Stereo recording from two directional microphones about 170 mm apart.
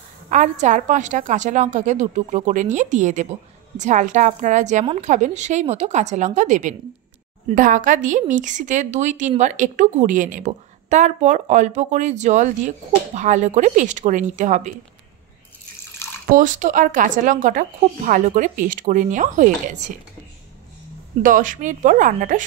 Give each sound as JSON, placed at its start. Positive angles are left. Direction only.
{"t": 0.3, "sound": "a woman's voice", "side_deg": -45}
{"t": 16.3, "sound": "a woman's voice", "side_deg": -50}
{"t": 21.2, "sound": "a woman's voice", "side_deg": -50}